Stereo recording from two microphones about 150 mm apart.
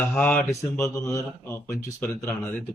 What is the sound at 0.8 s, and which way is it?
Speech, 20° left (ahead or behind).